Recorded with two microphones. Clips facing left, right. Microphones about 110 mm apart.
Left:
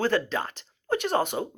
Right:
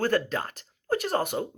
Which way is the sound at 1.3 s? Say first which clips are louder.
Even; 15° left (ahead or behind).